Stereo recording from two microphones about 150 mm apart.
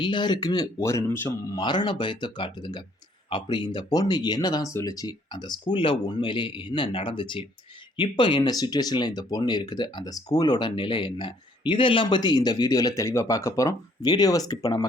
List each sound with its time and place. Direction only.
0.0 s speech: 30° left (ahead or behind); by 1.5 s 15° left (ahead or behind)
1.5 s speech: 30° left (ahead or behind)